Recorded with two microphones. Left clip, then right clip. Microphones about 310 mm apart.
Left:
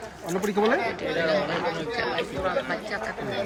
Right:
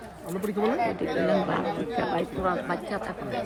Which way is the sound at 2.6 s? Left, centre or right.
Right.